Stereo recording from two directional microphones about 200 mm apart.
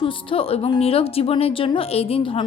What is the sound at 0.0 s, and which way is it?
A woman's voice, 25° left (ahead or behind).